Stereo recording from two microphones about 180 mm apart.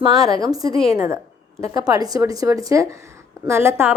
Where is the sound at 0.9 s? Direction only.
15° right (ahead or behind).